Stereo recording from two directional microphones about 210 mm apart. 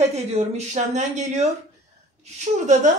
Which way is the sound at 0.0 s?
30° right (ahead or behind).